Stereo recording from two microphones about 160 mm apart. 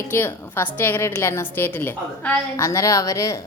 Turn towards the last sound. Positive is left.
turn(degrees=20)  # may be behind; listen again after turning